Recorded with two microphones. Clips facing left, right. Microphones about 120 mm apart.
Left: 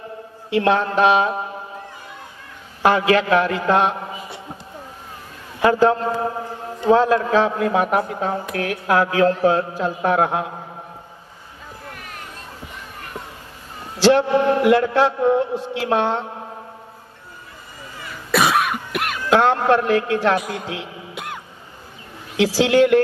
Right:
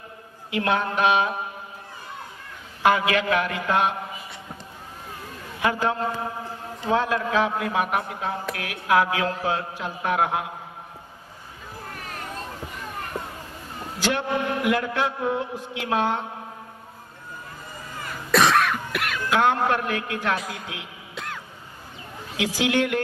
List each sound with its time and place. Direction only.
0.5 s a man's voice: 35° left (ahead or behind)
2.8 s a man's voice: 35° left (ahead or behind)
5.6 s a man's voice: 35° left (ahead or behind)
13.9 s a man's voice: 30° left (ahead or behind)
18.3 s cough: 5° left (ahead or behind)
18.9 s a man's voice: 35° left (ahead or behind)
21.1 s throat clearing: 15° left (ahead or behind)
22.4 s a man's voice: 35° left (ahead or behind)